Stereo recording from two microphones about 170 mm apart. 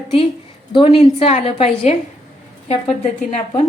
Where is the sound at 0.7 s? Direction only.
35° left (ahead or behind).